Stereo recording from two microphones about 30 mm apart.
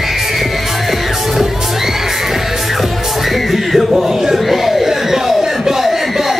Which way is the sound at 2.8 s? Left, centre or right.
Centre.